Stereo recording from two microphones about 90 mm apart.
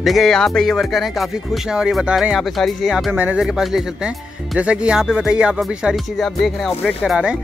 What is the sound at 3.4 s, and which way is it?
Speech, 5° right (ahead or behind).